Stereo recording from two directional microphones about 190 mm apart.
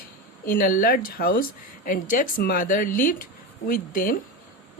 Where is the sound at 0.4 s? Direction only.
50° left (ahead or behind).